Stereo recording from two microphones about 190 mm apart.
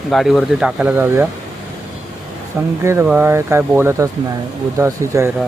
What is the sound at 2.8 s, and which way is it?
Speech, 10° right (ahead or behind).